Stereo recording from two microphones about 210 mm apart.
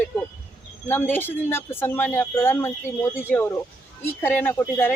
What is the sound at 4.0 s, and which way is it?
Speech, 10° left (ahead or behind).